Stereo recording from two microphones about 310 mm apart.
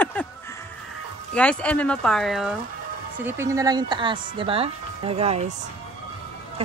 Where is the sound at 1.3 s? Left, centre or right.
Centre.